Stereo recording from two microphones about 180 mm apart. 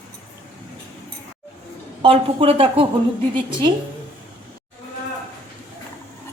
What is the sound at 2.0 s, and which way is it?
Speech, 30° right (ahead or behind).